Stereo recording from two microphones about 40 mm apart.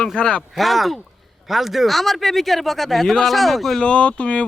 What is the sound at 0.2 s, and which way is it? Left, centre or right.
Speech, left.